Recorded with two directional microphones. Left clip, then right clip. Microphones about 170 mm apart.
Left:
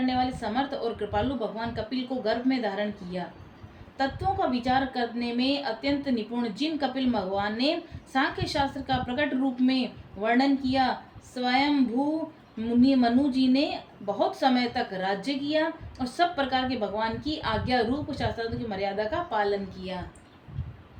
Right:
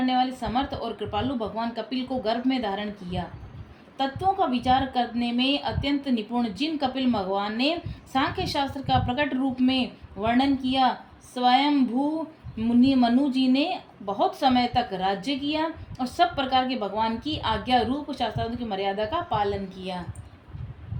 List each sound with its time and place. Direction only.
0.0 s a woman's voice: 45° right (ahead or behind)
12.8 s a woman's voice: 45° right (ahead or behind)